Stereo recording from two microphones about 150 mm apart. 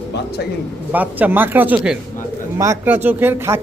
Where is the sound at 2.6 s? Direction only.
15° right (ahead or behind).